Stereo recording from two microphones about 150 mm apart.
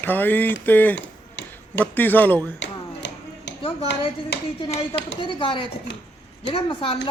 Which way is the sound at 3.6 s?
40° left (ahead or behind).